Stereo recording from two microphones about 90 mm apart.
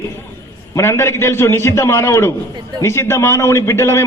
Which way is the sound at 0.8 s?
30° left (ahead or behind).